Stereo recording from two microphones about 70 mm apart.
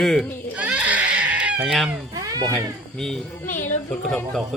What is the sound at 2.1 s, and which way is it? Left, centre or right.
Music, right.